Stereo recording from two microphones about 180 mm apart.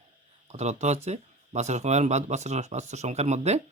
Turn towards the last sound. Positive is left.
turn(degrees=-40)  # may be behind; listen again after turning